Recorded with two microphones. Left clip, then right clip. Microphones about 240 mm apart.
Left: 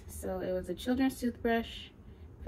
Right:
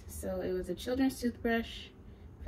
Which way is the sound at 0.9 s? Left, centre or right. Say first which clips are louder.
Right 1 dB; left.